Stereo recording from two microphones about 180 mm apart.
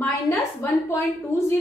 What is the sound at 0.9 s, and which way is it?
Speech, 15° left (ahead or behind).